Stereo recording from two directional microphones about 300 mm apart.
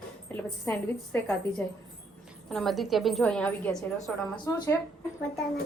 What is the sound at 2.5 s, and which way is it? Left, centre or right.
A woman's voice, centre.